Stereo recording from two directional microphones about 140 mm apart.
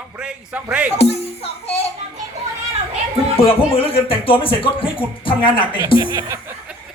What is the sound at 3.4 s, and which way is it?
Speech, 40° left (ahead or behind).